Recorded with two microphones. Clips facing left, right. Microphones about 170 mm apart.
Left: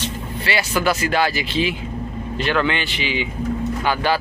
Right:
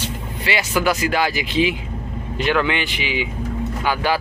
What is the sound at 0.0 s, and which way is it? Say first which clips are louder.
Speech: left 1 dB; 15° right (ahead or behind).